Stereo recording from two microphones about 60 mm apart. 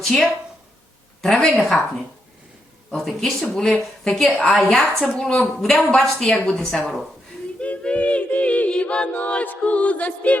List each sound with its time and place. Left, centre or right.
0.0 s a woman's voice: centre
2.9 s a woman's voice: centre
3.4 s a woman's voice: centre
4.1 s a woman's voice: centre
7.6 s a capella: left